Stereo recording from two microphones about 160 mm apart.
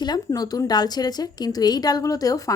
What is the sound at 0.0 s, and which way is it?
A woman's voice, 25° left (ahead or behind).